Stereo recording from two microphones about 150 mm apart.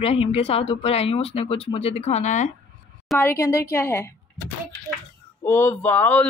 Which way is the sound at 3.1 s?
15° left (ahead or behind).